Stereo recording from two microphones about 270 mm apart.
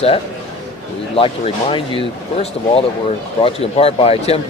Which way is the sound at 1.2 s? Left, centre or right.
Centre.